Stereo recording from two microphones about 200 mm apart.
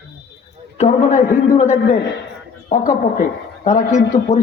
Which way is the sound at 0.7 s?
35° left (ahead or behind).